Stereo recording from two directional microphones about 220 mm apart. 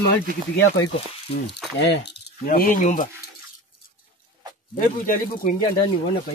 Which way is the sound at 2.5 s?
40° left (ahead or behind).